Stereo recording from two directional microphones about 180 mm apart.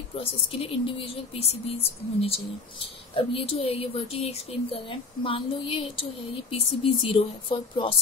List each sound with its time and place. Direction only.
0.1 s speech: 30° left (ahead or behind)